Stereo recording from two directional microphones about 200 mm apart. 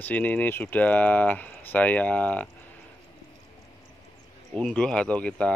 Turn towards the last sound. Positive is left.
turn(degrees=5)  # may be behind; listen again after turning